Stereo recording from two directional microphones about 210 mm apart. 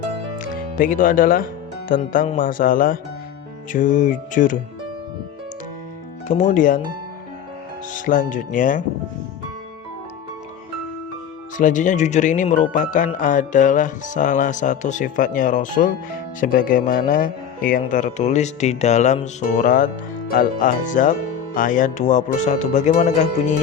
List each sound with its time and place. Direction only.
0.8 s speech: 40° left (ahead or behind)
2.1 s speech: 30° left (ahead or behind)
2.4 s speech: 40° left (ahead or behind)
6.2 s speech: 35° left (ahead or behind)
7.9 s speech: 40° left (ahead or behind)
11.5 s speech: 35° left (ahead or behind)